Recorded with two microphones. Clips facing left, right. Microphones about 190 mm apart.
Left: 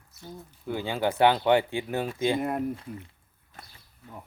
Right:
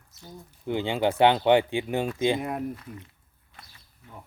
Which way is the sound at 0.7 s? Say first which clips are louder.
Right 3 dB; 20° right (ahead or behind).